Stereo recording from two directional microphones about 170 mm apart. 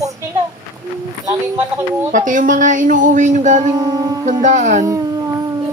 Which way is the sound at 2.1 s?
50° right (ahead or behind).